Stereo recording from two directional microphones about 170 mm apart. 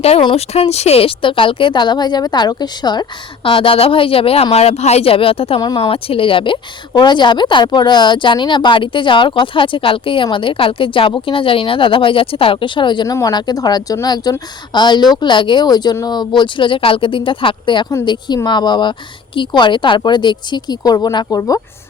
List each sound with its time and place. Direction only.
0.0 s speech: 30° left (ahead or behind)